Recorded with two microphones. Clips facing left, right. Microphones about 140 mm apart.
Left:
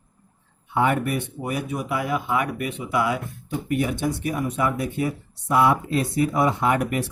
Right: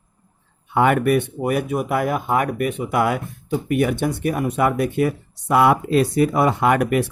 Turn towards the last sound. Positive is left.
turn(degrees=-70)  # may be behind; listen again after turning